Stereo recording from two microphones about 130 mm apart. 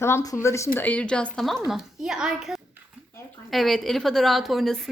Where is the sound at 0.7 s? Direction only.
10° left (ahead or behind).